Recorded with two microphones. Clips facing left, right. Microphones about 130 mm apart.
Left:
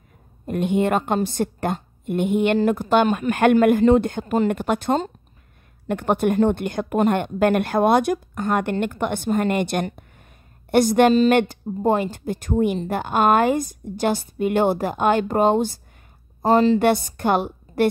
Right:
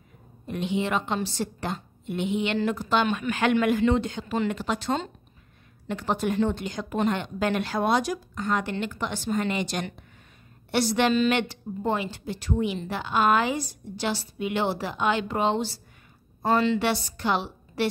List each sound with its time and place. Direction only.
0.5 s a woman's voice: 50° left (ahead or behind)